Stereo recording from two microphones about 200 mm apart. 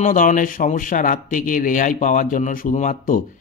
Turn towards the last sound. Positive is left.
turn(degrees=40)  # may be behind; listen again after turning